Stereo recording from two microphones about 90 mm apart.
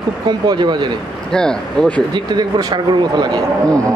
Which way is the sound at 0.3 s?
55° right (ahead or behind).